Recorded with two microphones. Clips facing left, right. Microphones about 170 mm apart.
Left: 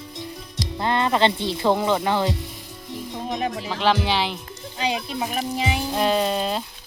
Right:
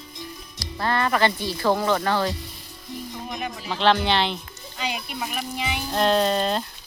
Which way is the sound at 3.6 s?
5° left (ahead or behind).